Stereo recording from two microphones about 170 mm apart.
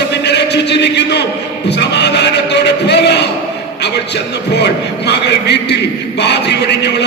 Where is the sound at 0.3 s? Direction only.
80° left.